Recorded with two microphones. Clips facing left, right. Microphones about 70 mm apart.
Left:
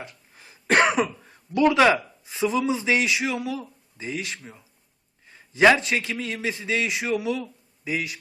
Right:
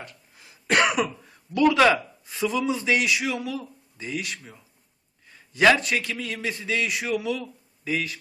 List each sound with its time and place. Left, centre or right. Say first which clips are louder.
0.3 s a man's voice: left 2 dB; left; by 8.2 s centre